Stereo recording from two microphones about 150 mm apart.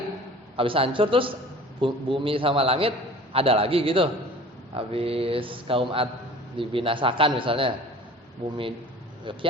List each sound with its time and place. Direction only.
0.5 s a man's voice: 35° right (ahead or behind)